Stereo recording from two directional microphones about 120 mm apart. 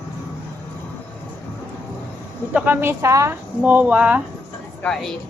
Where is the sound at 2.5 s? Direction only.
20° right (ahead or behind).